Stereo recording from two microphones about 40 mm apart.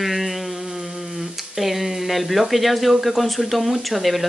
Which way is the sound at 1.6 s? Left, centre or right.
Centre.